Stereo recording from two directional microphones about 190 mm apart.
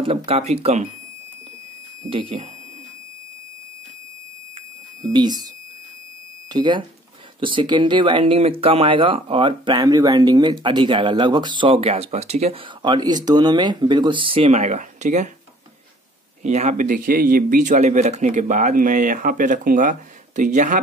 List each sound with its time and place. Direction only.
0.0 s speech: 30° right (ahead or behind)
2.0 s speech: 30° right (ahead or behind)
5.0 s speech: 20° right (ahead or behind)
6.5 s speech: 25° right (ahead or behind); by 15.3 s 40° right (ahead or behind)
16.4 s speech: 40° right (ahead or behind)